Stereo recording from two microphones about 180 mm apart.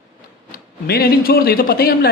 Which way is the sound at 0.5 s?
55° left (ahead or behind).